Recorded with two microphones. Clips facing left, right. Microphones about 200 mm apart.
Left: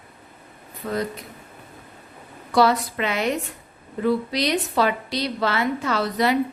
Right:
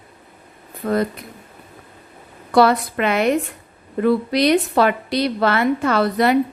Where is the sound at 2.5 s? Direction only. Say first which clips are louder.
Right 4 dB; 60° right (ahead or behind).